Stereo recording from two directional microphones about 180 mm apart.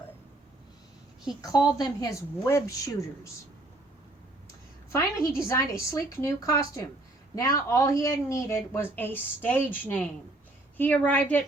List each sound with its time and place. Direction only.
1.4 s speech: 20° left (ahead or behind)
4.9 s speech: 15° left (ahead or behind)